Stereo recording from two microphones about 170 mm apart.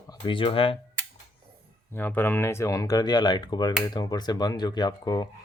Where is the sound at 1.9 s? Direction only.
10° left (ahead or behind).